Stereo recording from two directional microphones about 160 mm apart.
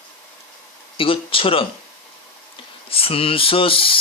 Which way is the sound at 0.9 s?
35° left (ahead or behind).